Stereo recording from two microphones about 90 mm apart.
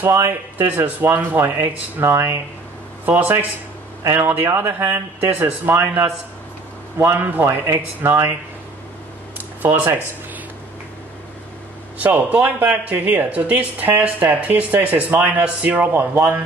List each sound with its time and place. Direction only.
0.0 s speech: 25° right (ahead or behind)
9.6 s speech: 20° right (ahead or behind)
12.0 s speech: 15° right (ahead or behind)